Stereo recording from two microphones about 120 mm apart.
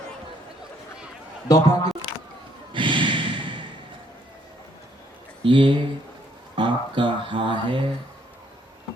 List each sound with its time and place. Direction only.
1.5 s speech: 30° left (ahead or behind)
2.7 s snort: 45° right (ahead or behind)
5.4 s speech: 45° right (ahead or behind)
6.6 s a sound: 40° right (ahead or behind)